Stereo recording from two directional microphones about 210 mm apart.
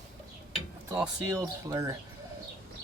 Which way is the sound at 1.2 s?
15° right (ahead or behind).